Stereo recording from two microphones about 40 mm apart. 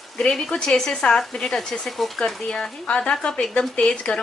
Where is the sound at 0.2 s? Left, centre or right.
Centre.